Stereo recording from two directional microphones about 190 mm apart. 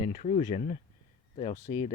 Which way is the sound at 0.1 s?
40° left (ahead or behind).